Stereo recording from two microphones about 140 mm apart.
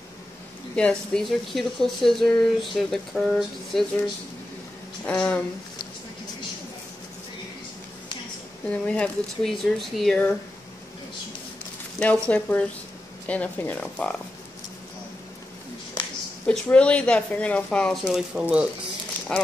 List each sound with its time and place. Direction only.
0.7 s speech: 5° left (ahead or behind)
8.6 s speech: 10° left (ahead or behind)
12.0 s speech: 10° left (ahead or behind)
16.4 s speech: 10° left (ahead or behind); by 18.7 s 10° right (ahead or behind)
19.3 s speech: 5° left (ahead or behind)